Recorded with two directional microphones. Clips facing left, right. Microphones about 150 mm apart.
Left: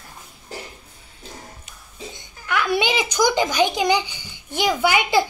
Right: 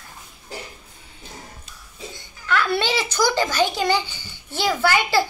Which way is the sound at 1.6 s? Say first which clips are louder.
Left 1 dB; 15° left (ahead or behind).